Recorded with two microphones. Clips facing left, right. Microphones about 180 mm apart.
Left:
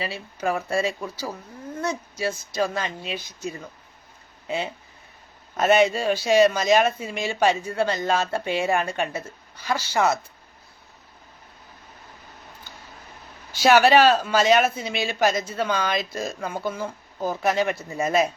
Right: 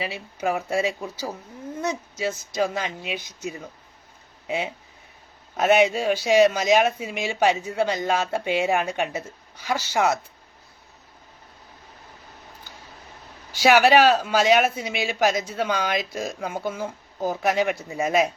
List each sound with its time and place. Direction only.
0.0 s speech: 15° right (ahead or behind)
13.5 s speech: 15° right (ahead or behind)